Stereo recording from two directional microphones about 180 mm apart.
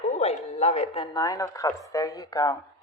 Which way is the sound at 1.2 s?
20° left (ahead or behind).